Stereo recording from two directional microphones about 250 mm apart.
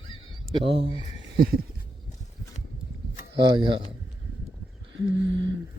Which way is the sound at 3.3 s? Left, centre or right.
Centre.